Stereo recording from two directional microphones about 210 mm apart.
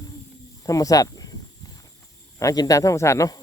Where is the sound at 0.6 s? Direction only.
15° left (ahead or behind).